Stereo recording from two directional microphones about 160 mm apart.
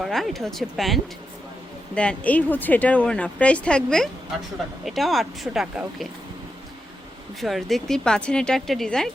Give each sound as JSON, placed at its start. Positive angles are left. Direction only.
{"t": 0.0, "sound": "speech", "side_deg": 0}
{"t": 7.4, "sound": "speech", "side_deg": 0}